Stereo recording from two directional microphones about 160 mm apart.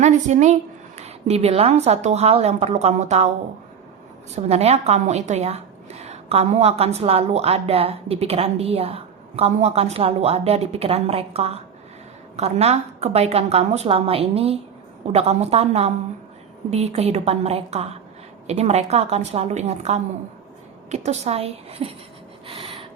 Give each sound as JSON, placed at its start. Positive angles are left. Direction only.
{"t": 0.0, "sound": "a woman's voice", "side_deg": -45}
{"t": 4.4, "sound": "a woman's voice", "side_deg": -40}
{"t": 22.4, "sound": "a sound", "side_deg": -35}